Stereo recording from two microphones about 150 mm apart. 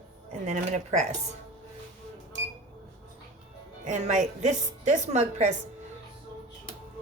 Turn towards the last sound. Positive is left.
turn(degrees=-50)  # may be behind; listen again after turning